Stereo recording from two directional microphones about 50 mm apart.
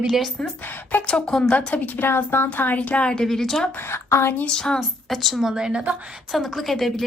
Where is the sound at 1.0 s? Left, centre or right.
Centre.